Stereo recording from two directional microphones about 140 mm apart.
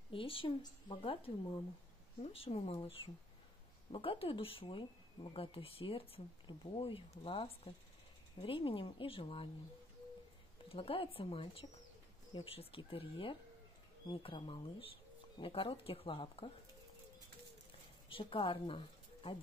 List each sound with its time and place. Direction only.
0.1 s speech: 40° left (ahead or behind)
10.7 s speech: 40° left (ahead or behind)
18.1 s a woman's voice: 35° left (ahead or behind)